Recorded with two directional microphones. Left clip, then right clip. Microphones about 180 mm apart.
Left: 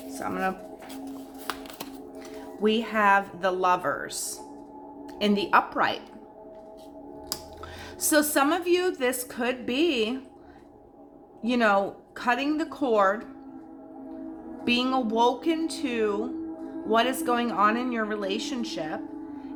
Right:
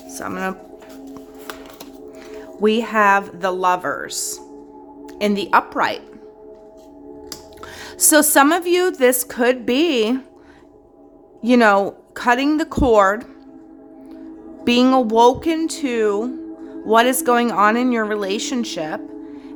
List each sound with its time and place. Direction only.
0.2 s speech: 55° right (ahead or behind)
2.3 s speech: 45° right (ahead or behind)
7.6 s speech: 45° right (ahead or behind)
11.4 s speech: 50° right (ahead or behind)
14.6 s speech: 50° right (ahead or behind)